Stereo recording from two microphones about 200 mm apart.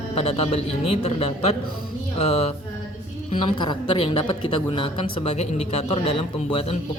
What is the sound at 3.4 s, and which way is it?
Speech, 20° left (ahead or behind).